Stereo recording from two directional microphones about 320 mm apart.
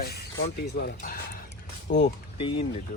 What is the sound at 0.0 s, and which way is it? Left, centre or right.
Speech, left.